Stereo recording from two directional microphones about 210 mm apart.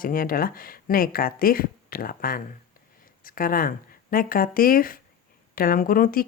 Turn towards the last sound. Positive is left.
turn(degrees=40)  # may be behind; listen again after turning